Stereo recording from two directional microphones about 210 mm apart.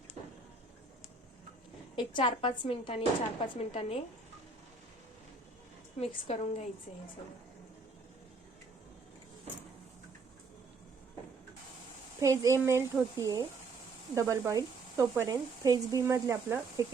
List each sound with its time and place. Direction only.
2.0 s a woman's voice: 25° left (ahead or behind)
6.0 s a woman's voice: 30° left (ahead or behind)
12.2 s speech: 15° right (ahead or behind)